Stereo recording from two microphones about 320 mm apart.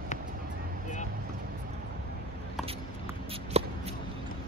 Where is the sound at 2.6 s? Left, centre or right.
Centre.